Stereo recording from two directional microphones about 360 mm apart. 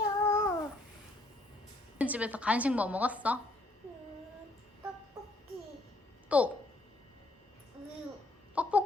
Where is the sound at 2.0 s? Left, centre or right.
Centre.